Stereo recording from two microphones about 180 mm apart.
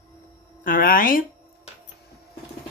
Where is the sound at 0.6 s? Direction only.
50° left (ahead or behind).